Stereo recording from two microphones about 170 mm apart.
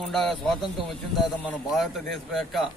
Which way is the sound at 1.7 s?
Centre (ahead or behind).